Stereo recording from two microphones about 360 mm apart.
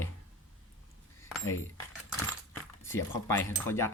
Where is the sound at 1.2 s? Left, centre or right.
Centre.